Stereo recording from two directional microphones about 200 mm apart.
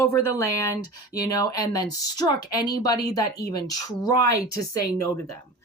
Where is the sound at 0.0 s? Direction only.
15° left (ahead or behind).